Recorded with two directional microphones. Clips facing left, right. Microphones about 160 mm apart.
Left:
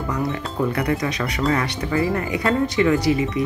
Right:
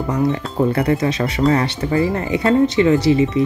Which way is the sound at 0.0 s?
30° right (ahead or behind).